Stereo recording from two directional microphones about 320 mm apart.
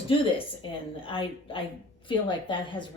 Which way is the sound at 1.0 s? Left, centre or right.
Centre.